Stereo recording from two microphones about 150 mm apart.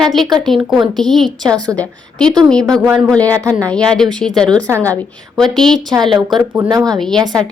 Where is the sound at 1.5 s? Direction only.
25° right (ahead or behind).